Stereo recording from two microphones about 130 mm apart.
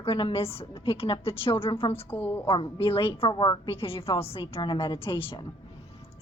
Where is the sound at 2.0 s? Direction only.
15° left (ahead or behind).